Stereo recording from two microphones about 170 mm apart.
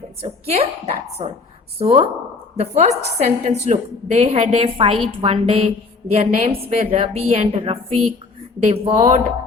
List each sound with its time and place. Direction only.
0.2 s a woman's voice: 35° right (ahead or behind)